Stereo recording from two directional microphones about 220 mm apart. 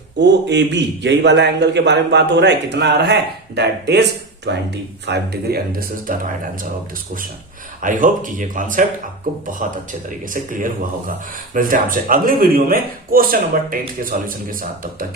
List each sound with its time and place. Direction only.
0.2 s a man's voice: 50° right (ahead or behind)
7.8 s a man's voice: 35° right (ahead or behind)
10.3 s a man's voice: 40° right (ahead or behind)